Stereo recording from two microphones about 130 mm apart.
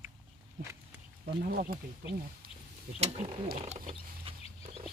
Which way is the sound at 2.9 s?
60° right (ahead or behind).